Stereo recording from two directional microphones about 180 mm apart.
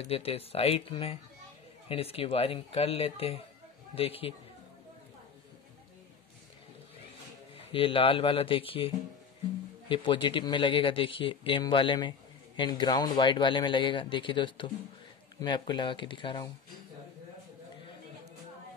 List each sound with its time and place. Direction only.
0.1 s speech: 30° left (ahead or behind)
7.5 s speech: 30° left (ahead or behind)